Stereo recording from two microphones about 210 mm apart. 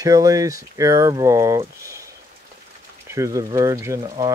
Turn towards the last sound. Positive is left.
turn(degrees=-15)  # may be behind; listen again after turning